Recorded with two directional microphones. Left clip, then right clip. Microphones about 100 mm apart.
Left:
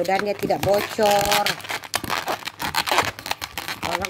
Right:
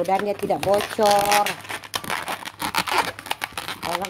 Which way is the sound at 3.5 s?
35° left (ahead or behind).